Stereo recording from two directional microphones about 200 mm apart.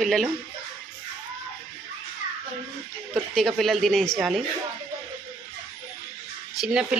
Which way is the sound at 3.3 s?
Centre (ahead or behind).